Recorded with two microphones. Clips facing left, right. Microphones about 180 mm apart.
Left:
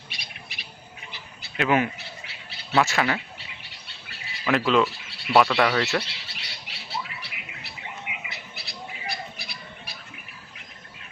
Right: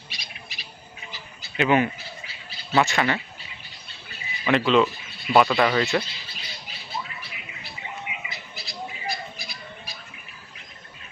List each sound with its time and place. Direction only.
0.1 s bird: 55° left (ahead or behind)
1.5 s speech: centre (ahead or behind)
2.0 s bird: 65° left (ahead or behind)
2.7 s speech: centre (ahead or behind)
3.6 s bird: 80° left
4.4 s speech: centre (ahead or behind)
4.9 s a sound: 90° left
5.3 s speech: centre (ahead or behind)
6.0 s squawk: 75° left (ahead or behind)